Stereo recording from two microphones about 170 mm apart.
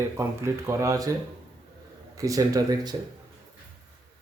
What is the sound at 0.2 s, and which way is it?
Speech, 15° right (ahead or behind).